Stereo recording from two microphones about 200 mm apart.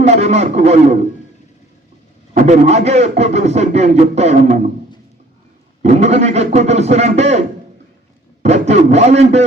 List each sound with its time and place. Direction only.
0.0 s a man's voice: 30° right (ahead or behind)
2.3 s speech: 35° right (ahead or behind)
5.8 s speech: 35° right (ahead or behind)